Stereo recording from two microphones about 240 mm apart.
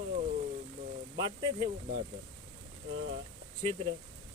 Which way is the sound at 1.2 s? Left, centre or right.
Centre.